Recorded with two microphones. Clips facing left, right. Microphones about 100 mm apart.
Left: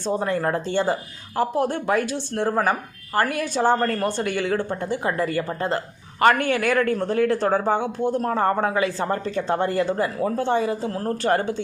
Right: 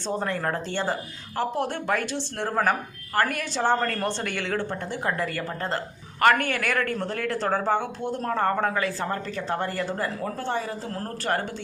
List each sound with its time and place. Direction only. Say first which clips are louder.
0.0 s a woman's voice: left 4 dB; 10° left (ahead or behind)